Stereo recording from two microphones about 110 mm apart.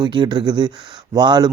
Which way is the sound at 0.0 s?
45° right (ahead or behind).